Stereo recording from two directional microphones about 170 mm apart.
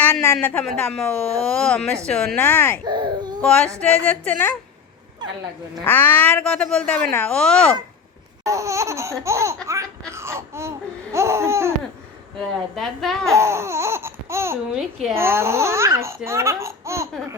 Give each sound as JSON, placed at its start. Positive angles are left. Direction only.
{"t": 0.0, "sound": "a sound", "side_deg": 15}
{"t": 0.3, "sound": "speech", "side_deg": 5}
{"t": 2.8, "sound": "baby cry", "side_deg": -25}
{"t": 3.4, "sound": "speech", "side_deg": 5}
{"t": 5.8, "sound": "speech", "side_deg": 10}
{"t": 8.4, "sound": "speech", "side_deg": -20}
{"t": 10.1, "sound": "babbling", "side_deg": -15}
{"t": 12.7, "sound": "speech", "side_deg": 0}
{"t": 13.3, "sound": "laughter", "side_deg": -15}
{"t": 14.7, "sound": "speech", "side_deg": 0}
{"t": 15.1, "sound": "speech", "side_deg": -15}